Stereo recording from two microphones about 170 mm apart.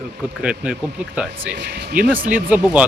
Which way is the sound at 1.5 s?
75° right (ahead or behind).